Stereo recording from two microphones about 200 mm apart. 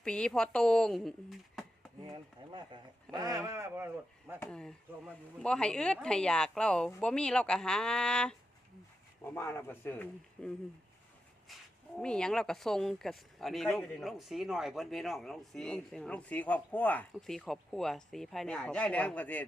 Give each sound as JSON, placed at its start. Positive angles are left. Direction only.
{"t": 0.0, "sound": "speech", "side_deg": 5}
{"t": 2.0, "sound": "speech", "side_deg": -25}
{"t": 4.4, "sound": "speech", "side_deg": 5}
{"t": 11.9, "sound": "speech", "side_deg": 5}